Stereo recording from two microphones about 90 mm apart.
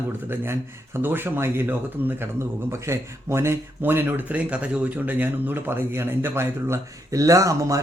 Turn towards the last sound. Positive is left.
turn(degrees=-35)  # may be behind; listen again after turning